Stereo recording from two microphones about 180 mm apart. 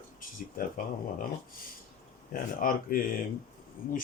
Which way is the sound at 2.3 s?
50° left (ahead or behind).